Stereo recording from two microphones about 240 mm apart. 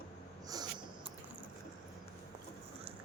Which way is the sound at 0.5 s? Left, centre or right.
Centre.